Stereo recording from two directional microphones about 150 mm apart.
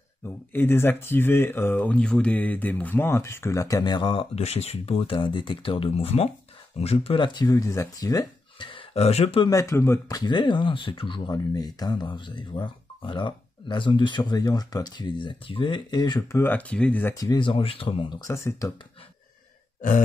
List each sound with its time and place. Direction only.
0.5 s speech: 15° left (ahead or behind); by 7.4 s 35° left (ahead or behind)
7.4 s speech: 20° left (ahead or behind); by 9.5 s 40° left (ahead or behind)
9.5 s speech: 20° left (ahead or behind)
17.1 s speech: 25° left (ahead or behind)
18.2 s speech: 20° left (ahead or behind)